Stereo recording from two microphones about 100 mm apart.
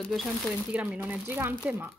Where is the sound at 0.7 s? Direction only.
15° right (ahead or behind).